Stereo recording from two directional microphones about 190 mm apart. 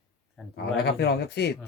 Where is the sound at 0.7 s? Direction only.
55° left (ahead or behind).